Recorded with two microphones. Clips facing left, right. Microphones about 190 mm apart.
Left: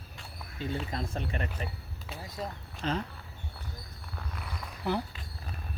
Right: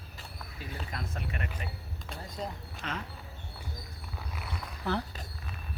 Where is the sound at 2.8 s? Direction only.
35° left (ahead or behind).